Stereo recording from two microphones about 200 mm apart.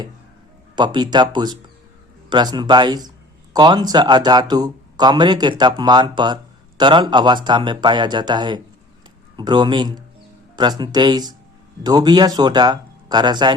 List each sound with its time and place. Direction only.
0.8 s speech: 20° right (ahead or behind)